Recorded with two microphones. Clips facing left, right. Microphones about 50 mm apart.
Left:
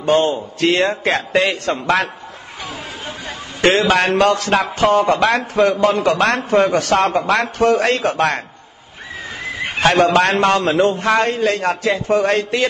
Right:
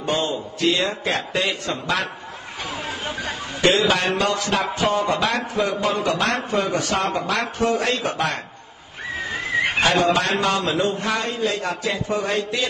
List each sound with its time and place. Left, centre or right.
0.1 s a man's voice: left
3.6 s a man's voice: left
10.1 s a man's voice: left